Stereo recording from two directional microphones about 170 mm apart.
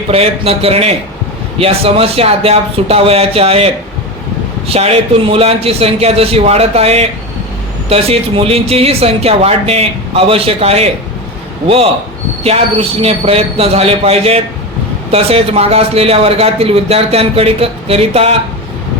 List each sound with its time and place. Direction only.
0.1 s a man's voice: 35° right (ahead or behind)
4.7 s a man's voice: 35° right (ahead or behind)
12.4 s a man's voice: 35° right (ahead or behind)